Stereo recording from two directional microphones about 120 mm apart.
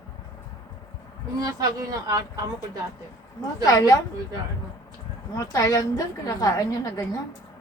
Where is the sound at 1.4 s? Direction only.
35° right (ahead or behind).